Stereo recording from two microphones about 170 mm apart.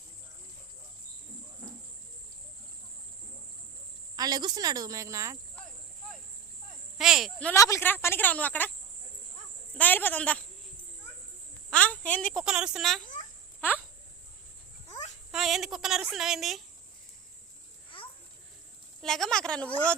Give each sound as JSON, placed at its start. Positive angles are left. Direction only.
{"t": 4.2, "sound": "a woman's voice", "side_deg": -25}
{"t": 7.0, "sound": "a woman's voice", "side_deg": 0}
{"t": 7.5, "sound": "speech", "side_deg": 20}
{"t": 9.7, "sound": "speech", "side_deg": 10}
{"t": 11.7, "sound": "a woman's voice", "side_deg": 10}
{"t": 13.6, "sound": "a sound", "side_deg": 10}
{"t": 15.3, "sound": "a woman's voice", "side_deg": 0}
{"t": 19.0, "sound": "a woman's voice", "side_deg": 5}